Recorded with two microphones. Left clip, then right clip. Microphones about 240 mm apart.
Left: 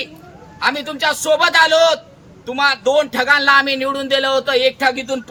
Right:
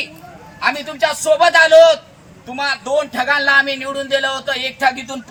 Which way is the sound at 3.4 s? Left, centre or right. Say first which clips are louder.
Left 1 dB; left.